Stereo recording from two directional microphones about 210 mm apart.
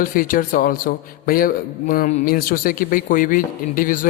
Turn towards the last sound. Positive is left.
turn(degrees=40)  # may be behind; listen again after turning